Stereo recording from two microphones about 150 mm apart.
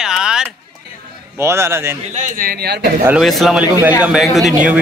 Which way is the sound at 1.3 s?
15° right (ahead or behind).